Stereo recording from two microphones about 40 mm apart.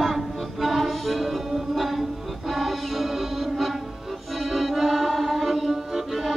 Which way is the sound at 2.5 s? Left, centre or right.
Centre.